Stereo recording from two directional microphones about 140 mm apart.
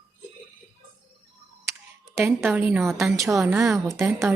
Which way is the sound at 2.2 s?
15° right (ahead or behind).